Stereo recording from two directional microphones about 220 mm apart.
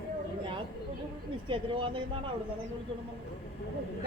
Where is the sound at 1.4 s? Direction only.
25° right (ahead or behind).